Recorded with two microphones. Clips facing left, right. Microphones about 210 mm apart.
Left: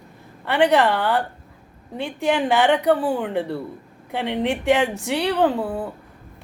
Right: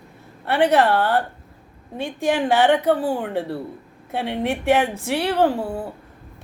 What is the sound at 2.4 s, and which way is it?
A woman's voice, 20° left (ahead or behind).